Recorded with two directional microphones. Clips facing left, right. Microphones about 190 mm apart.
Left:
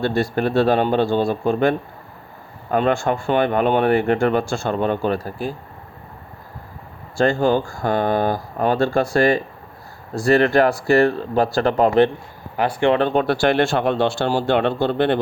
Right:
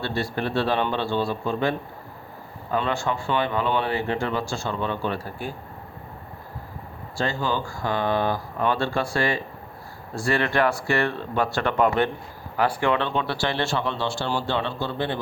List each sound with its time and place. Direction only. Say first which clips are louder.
0.0 s speech: left 7 dB; 45° left (ahead or behind)
7.2 s speech: left 9 dB; 50° left (ahead or behind)